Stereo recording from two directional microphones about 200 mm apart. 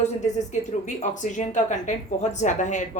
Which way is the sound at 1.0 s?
35° left (ahead or behind).